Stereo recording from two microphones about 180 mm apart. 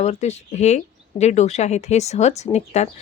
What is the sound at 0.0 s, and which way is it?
Speech, 40° left (ahead or behind).